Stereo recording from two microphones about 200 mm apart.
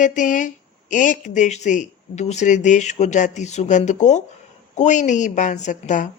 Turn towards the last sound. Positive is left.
turn(degrees=40)  # may be behind; listen again after turning